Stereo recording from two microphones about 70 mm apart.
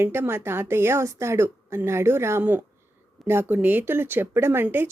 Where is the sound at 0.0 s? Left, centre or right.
Right.